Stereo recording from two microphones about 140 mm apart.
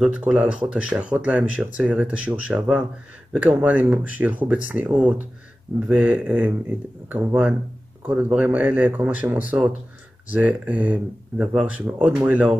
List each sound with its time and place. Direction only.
0.0 s speech: 10° right (ahead or behind)